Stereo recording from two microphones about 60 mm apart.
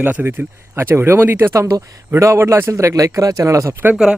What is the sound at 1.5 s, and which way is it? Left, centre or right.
Speech, right.